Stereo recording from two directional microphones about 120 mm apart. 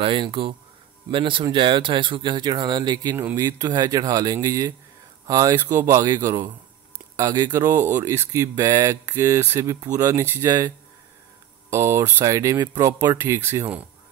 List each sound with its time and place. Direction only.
0.0 s speech: 45° right (ahead or behind); by 10.7 s 30° right (ahead or behind)
11.7 s speech: 25° right (ahead or behind)